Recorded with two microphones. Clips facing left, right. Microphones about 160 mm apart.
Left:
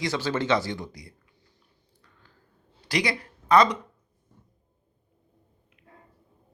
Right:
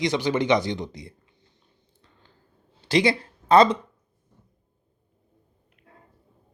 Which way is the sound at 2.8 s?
25° right (ahead or behind).